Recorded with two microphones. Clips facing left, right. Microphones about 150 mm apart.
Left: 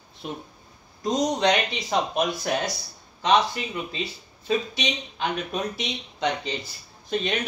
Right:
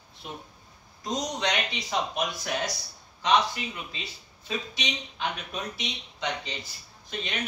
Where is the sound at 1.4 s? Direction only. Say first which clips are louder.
Left 7 dB; 35° left (ahead or behind).